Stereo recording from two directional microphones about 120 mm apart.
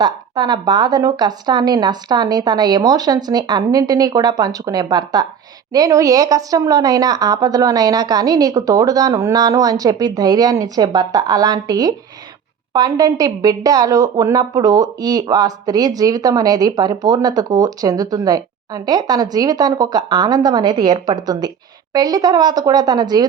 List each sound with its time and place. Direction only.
0.0 s a woman's voice: 35° right (ahead or behind)